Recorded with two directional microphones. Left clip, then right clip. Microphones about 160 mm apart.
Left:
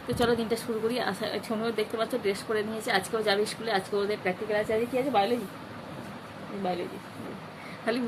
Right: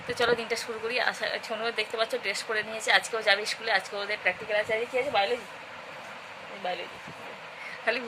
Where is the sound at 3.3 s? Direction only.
15° right (ahead or behind).